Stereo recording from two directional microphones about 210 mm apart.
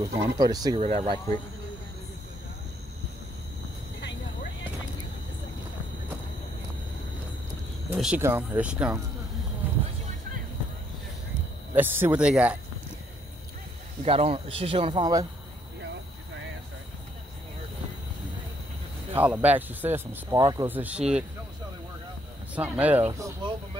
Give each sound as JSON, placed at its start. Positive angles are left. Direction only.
{"t": 0.0, "sound": "speech", "side_deg": -15}
{"t": 0.7, "sound": "speech", "side_deg": -30}
{"t": 4.0, "sound": "vehicle", "side_deg": 60}
{"t": 7.9, "sound": "speech", "side_deg": -10}
{"t": 9.6, "sound": "a sound", "side_deg": -10}
{"t": 11.7, "sound": "speech", "side_deg": -10}
{"t": 14.0, "sound": "speech", "side_deg": -25}
{"t": 19.1, "sound": "speech", "side_deg": -5}
{"t": 22.6, "sound": "speech", "side_deg": -10}